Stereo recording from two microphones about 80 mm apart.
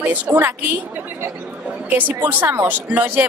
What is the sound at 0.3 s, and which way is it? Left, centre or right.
Speech, right.